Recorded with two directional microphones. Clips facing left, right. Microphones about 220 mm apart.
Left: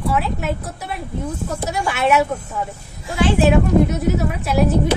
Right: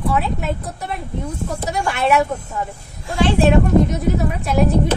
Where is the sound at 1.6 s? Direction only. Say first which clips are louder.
Even; 5° left (ahead or behind).